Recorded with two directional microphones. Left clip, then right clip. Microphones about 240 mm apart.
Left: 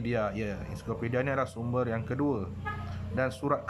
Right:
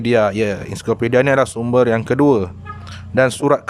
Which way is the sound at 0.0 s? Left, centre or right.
Right.